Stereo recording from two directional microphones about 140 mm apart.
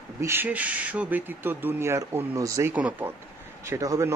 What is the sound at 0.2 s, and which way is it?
A man's voice, 15° right (ahead or behind).